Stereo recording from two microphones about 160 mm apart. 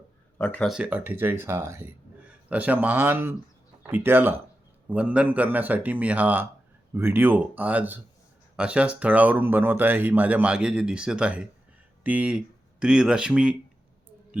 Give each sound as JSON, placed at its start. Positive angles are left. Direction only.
{"t": 0.3, "sound": "speech", "side_deg": 10}
{"t": 0.7, "sound": "speech", "side_deg": -10}